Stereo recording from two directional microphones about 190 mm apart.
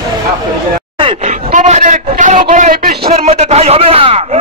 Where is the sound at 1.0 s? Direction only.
40° right (ahead or behind).